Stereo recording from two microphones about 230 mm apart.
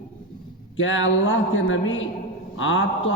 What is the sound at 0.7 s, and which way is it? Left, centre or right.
A man's voice, left.